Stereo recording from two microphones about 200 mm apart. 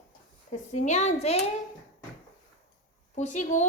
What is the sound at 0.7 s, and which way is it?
Speech, 35° left (ahead or behind).